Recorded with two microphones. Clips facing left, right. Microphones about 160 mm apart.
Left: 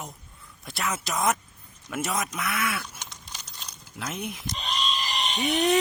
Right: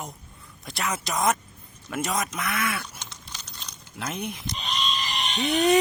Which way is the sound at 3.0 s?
15° left (ahead or behind).